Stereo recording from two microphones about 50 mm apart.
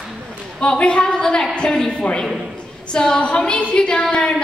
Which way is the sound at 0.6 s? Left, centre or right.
Centre.